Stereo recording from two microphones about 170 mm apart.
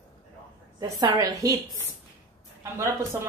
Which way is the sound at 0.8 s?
20° right (ahead or behind).